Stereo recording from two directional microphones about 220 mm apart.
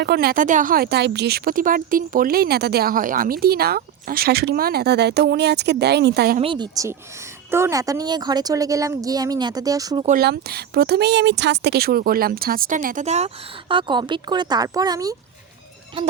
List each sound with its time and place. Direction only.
0.0 s speech: 45° right (ahead or behind)
6.4 s a woman's voice: 20° right (ahead or behind)
10.1 s speech: 45° right (ahead or behind); by 15.1 s 15° right (ahead or behind)